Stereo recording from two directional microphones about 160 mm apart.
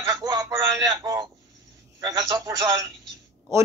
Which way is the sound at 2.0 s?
25° right (ahead or behind).